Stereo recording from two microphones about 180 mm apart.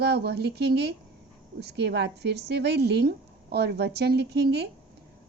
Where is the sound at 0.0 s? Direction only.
65° right (ahead or behind).